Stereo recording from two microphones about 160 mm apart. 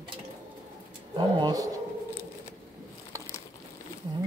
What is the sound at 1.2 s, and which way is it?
Speech, 25° right (ahead or behind).